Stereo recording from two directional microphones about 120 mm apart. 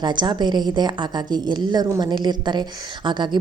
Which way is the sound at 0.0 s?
40° right (ahead or behind).